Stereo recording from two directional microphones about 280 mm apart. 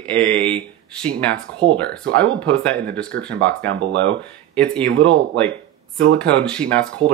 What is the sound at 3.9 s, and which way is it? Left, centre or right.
Speech, right.